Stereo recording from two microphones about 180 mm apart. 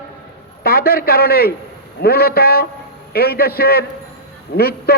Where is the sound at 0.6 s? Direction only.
60° left (ahead or behind).